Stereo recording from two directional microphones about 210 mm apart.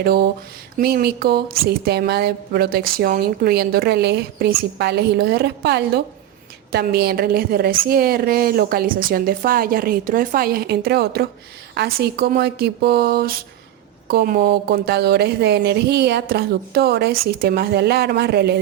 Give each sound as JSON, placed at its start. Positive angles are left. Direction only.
{"t": 0.0, "sound": "speech", "side_deg": -50}